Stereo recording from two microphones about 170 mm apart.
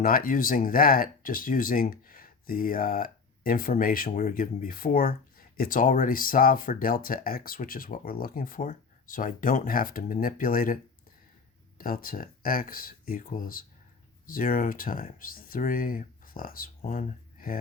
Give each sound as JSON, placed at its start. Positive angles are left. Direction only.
{"t": 0.0, "sound": "speech", "side_deg": 55}
{"t": 11.8, "sound": "speech", "side_deg": 55}